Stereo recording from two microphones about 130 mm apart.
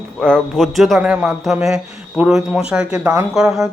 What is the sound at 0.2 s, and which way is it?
Speech, 5° left (ahead or behind).